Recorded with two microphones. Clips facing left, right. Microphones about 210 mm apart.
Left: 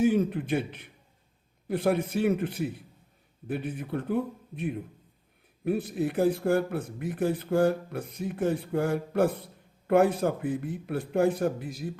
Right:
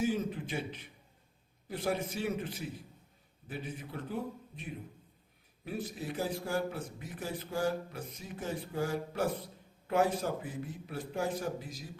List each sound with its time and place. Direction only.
0.0 s speech: 60° left (ahead or behind)